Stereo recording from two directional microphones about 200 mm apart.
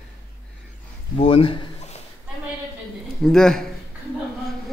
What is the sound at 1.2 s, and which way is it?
Speech, 30° left (ahead or behind).